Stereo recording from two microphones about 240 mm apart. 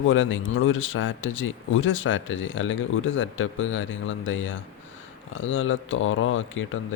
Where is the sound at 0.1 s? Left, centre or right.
Left.